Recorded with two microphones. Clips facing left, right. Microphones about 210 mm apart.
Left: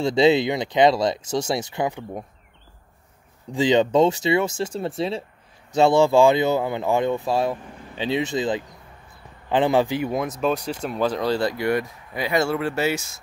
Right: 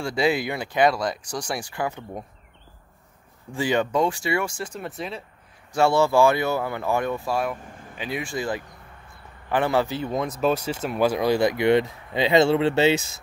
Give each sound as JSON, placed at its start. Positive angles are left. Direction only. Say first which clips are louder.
{"t": 0.0, "sound": "speech", "louder": "left 6 dB", "side_deg": 25}
{"t": 3.5, "sound": "speech", "louder": "left 5 dB", "side_deg": 20}
{"t": 5.7, "sound": "speech", "louder": "left 3 dB", "side_deg": 20}